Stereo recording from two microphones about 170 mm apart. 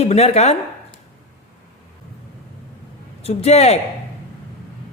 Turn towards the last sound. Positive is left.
turn(degrees=40)  # may be behind; listen again after turning